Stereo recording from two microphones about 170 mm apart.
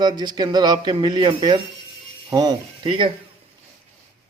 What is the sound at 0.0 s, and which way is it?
Speech, 25° right (ahead or behind).